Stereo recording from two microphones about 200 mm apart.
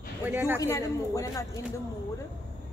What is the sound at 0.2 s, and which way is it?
Speech, 10° right (ahead or behind).